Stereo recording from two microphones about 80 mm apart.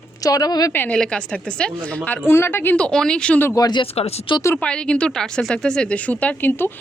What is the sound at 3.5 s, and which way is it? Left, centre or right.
Speech, left.